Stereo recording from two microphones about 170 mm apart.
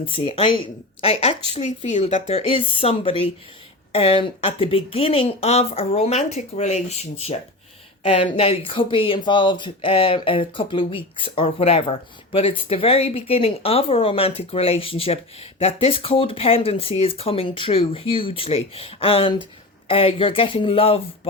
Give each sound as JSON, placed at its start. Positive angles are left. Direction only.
{"t": 0.1, "sound": "speech", "side_deg": 35}